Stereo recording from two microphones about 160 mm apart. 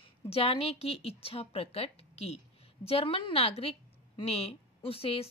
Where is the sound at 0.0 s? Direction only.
40° left (ahead or behind).